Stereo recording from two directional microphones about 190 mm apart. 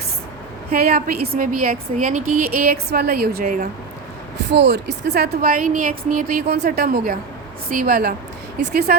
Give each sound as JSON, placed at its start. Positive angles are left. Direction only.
{"t": 0.7, "sound": "a woman's voice", "side_deg": -55}
{"t": 4.5, "sound": "a woman's voice", "side_deg": -65}